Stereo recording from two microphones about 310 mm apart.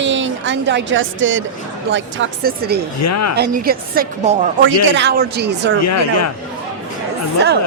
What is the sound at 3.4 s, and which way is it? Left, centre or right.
A woman's voice, right.